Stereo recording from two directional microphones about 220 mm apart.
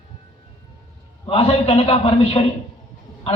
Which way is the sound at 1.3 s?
25° left (ahead or behind).